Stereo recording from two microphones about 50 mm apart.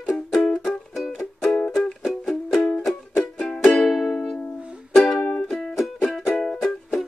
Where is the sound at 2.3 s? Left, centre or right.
Centre.